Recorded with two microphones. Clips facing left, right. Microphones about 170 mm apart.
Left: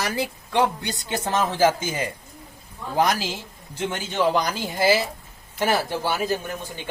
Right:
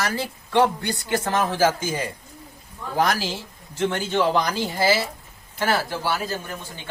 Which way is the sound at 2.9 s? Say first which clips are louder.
Even; 20° left (ahead or behind).